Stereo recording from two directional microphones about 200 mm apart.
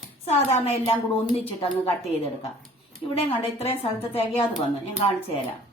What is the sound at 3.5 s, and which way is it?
Speech, 30° left (ahead or behind).